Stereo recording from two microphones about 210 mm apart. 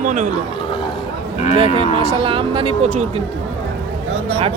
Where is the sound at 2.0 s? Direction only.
25° right (ahead or behind).